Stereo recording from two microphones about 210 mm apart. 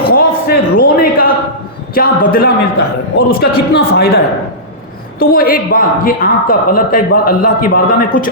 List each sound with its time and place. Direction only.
0.1 s a sound: 45° left (ahead or behind)
1.9 s a woman's voice: 45° left (ahead or behind)
5.2 s a woman's voice: 45° left (ahead or behind)